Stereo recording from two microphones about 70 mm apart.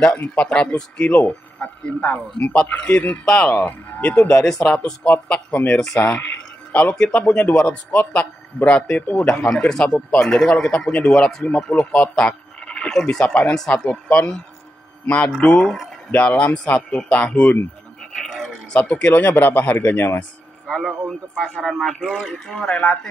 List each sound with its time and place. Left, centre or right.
0.0 s a man's voice: centre
18.1 s a sound: centre
18.7 s a man's voice: centre
20.6 s a man's voice: centre